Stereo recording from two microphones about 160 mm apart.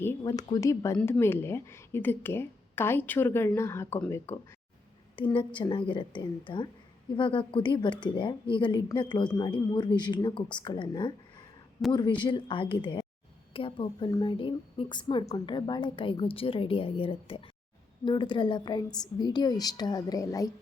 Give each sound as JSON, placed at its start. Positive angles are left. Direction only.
{"t": 0.0, "sound": "a woman's voice", "side_deg": 20}
{"t": 0.9, "sound": "a woman's voice", "side_deg": 5}
{"t": 5.1, "sound": "a woman's voice", "side_deg": 30}